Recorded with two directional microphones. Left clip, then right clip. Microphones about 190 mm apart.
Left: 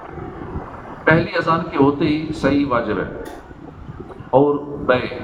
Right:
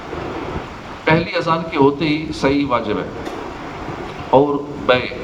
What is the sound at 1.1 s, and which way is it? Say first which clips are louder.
A man's voice: even; 45° right (ahead or behind).